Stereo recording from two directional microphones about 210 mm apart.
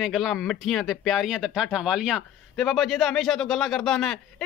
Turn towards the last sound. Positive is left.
turn(degrees=0)  # may be behind; listen again after turning